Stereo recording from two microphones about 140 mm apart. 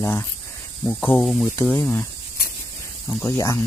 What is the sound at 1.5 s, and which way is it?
Speech, 15° left (ahead or behind).